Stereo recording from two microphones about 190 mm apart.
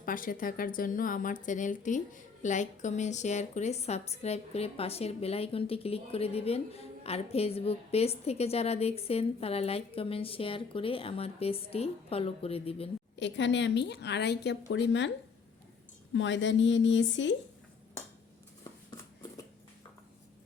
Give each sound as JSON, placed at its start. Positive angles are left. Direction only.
{"t": 0.0, "sound": "speech", "side_deg": 45}
{"t": 13.1, "sound": "speech", "side_deg": 70}
{"t": 16.1, "sound": "speech", "side_deg": 75}